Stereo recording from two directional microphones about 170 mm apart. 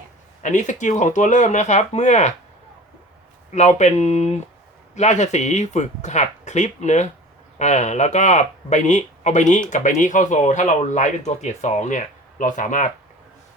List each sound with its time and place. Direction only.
0.4 s speech: 45° left (ahead or behind)
3.5 s speech: 45° left (ahead or behind)